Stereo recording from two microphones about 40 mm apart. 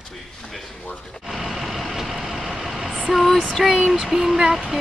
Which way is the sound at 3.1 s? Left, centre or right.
Centre.